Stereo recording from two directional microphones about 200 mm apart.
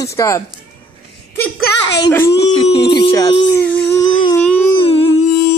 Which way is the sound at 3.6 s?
10° left (ahead or behind).